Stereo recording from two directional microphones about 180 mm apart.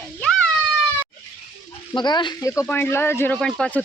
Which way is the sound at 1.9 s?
25° left (ahead or behind).